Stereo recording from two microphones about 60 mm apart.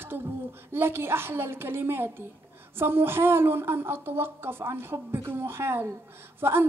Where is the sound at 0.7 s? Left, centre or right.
Right.